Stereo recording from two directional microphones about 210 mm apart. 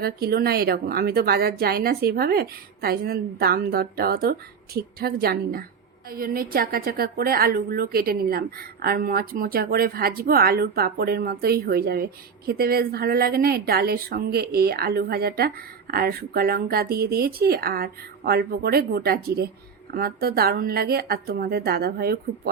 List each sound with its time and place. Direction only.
0.0 s speech: 50° right (ahead or behind)